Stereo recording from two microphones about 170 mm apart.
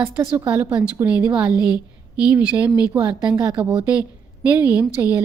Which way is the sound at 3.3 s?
20° right (ahead or behind).